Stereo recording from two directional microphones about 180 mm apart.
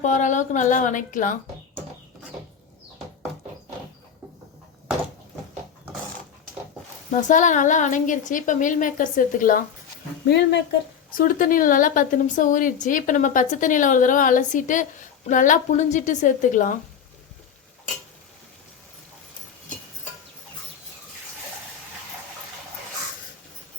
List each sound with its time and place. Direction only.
0.0 s a woman's voice: 45° left (ahead or behind)
7.1 s a woman's voice: 45° left (ahead or behind)
10.2 s a woman's voice: 70° left (ahead or behind)
11.1 s a woman's voice: 50° left (ahead or behind)